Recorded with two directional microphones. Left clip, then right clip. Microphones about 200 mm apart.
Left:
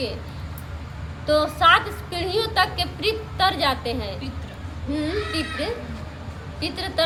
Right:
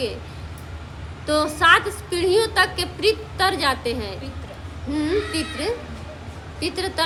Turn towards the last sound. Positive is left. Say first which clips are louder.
# right 1 dB
turn(degrees=-40)  # may be behind; listen again after turning